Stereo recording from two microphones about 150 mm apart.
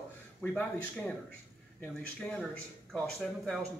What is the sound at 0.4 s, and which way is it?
Speech, 10° left (ahead or behind).